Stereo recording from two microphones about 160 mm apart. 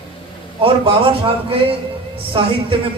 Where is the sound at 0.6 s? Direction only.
35° right (ahead or behind).